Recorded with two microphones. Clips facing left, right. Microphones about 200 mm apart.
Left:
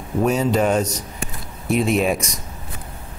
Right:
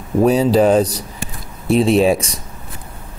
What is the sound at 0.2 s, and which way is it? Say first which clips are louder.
Speech: right 6 dB; 35° right (ahead or behind).